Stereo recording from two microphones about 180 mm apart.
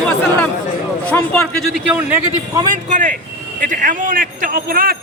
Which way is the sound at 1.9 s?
10° right (ahead or behind).